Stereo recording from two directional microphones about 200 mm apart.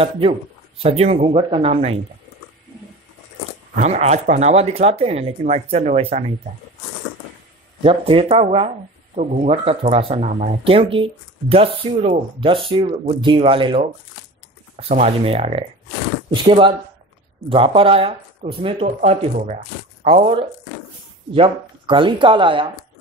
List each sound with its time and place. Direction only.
0.7 s speech: 30° right (ahead or behind)
3.8 s speech: 35° right (ahead or behind)
7.8 s speech: 30° right (ahead or behind)